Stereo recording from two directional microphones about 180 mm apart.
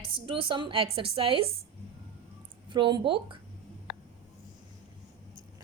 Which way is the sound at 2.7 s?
25° right (ahead or behind).